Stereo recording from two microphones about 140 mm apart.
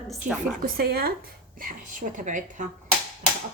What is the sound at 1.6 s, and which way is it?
A woman's voice, 80° right.